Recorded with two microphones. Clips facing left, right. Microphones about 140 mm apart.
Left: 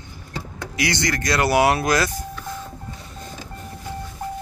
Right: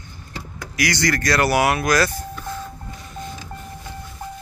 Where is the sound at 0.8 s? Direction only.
25° left (ahead or behind).